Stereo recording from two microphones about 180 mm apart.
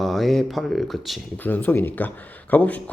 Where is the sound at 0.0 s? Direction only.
Centre (ahead or behind).